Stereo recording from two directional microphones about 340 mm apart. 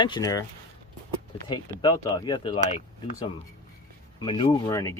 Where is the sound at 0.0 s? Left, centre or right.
Centre.